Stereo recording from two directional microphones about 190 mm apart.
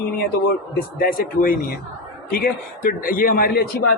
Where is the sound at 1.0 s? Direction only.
50° left (ahead or behind).